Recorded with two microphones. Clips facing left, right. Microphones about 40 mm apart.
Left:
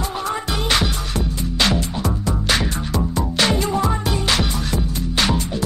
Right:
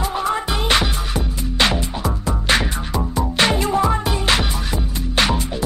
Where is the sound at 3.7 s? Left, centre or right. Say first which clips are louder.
Right 2 dB; centre.